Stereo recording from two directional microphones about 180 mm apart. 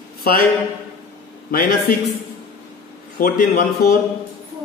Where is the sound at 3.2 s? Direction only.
55° left (ahead or behind).